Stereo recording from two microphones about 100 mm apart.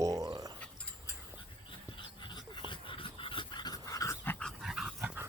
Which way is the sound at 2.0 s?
55° left (ahead or behind).